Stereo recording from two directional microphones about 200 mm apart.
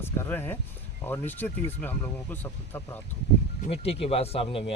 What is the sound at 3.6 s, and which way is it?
Speech, 30° left (ahead or behind).